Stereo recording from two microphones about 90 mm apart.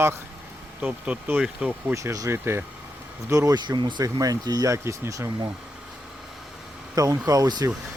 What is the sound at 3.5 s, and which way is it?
Speech, 55° right (ahead or behind).